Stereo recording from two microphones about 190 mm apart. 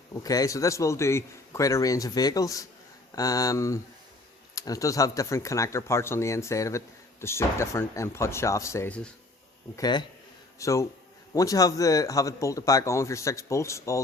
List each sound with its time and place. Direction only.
0.1 s speech: 20° left (ahead or behind)